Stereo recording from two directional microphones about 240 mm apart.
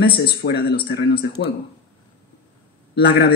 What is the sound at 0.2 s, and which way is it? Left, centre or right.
Speech, left.